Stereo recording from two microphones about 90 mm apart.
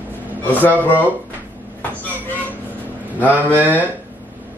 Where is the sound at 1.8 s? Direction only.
20° left (ahead or behind).